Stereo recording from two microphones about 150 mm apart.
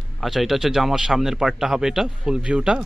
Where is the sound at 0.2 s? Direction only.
Centre (ahead or behind).